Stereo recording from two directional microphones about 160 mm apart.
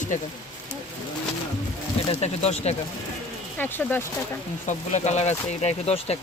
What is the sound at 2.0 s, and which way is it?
Speech, 40° left (ahead or behind).